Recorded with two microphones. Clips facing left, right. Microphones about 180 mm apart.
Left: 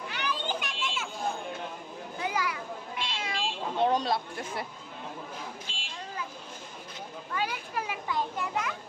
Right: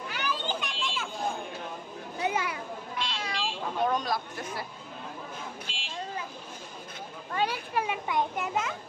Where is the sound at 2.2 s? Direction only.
25° right (ahead or behind).